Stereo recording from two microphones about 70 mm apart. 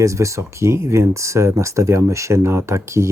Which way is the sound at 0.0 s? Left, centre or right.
Right.